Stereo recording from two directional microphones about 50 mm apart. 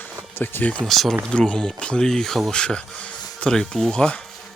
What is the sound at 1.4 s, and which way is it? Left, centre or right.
Speech, left.